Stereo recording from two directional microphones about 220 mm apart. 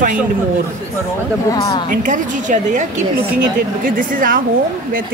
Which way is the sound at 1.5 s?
20° left (ahead or behind).